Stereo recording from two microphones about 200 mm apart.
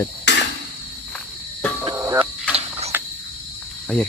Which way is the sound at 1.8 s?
20° right (ahead or behind).